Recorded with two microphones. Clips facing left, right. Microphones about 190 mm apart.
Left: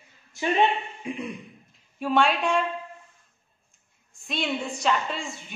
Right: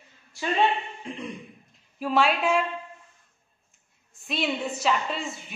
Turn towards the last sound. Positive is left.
turn(degrees=0)  # may be behind; listen again after turning